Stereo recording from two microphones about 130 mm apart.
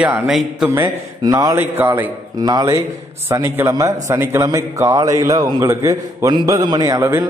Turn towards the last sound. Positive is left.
turn(degrees=-25)  # may be behind; listen again after turning